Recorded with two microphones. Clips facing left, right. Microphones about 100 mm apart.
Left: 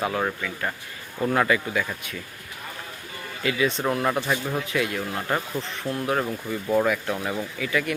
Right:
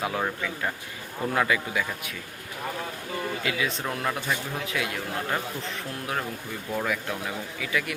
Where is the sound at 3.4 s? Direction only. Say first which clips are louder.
Left 10 dB; centre (ahead or behind).